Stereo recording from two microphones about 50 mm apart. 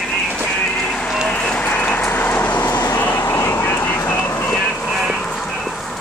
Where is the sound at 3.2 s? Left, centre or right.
Left.